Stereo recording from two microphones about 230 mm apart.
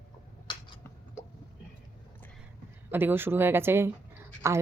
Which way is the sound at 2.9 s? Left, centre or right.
Centre.